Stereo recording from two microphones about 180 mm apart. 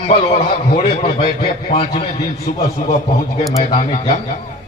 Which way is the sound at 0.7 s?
30° left (ahead or behind).